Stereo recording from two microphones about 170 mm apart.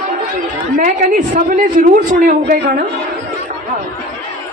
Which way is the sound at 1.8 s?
55° right (ahead or behind).